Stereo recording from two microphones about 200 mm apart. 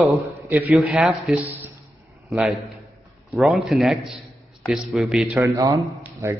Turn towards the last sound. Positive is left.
turn(degrees=-15)  # may be behind; listen again after turning